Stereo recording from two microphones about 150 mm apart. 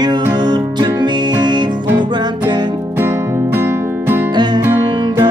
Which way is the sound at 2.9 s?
15° right (ahead or behind).